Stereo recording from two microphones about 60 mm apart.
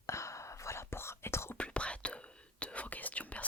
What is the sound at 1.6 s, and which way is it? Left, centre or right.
Whispering, centre.